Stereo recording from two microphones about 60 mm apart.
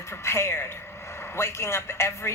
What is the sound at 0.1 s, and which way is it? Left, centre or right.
A man's voice, left.